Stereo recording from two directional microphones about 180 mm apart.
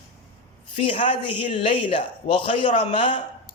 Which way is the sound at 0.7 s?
30° left (ahead or behind).